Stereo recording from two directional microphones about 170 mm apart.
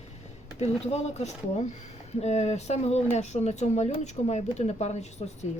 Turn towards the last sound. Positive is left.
turn(degrees=40)  # may be behind; listen again after turning